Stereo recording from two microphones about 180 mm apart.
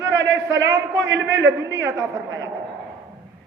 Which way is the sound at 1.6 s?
15° right (ahead or behind).